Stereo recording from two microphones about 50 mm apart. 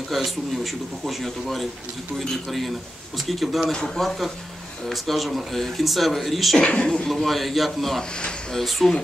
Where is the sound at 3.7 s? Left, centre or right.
Centre.